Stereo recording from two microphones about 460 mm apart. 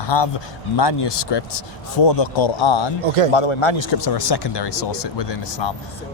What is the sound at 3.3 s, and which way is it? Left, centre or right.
Speech, left.